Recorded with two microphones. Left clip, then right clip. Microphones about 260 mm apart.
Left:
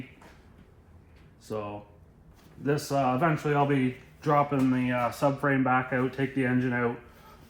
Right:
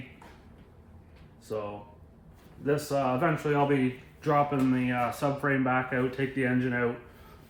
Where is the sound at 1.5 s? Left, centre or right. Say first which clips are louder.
Even; left.